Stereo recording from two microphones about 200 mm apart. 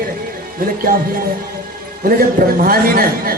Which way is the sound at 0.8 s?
45° right (ahead or behind).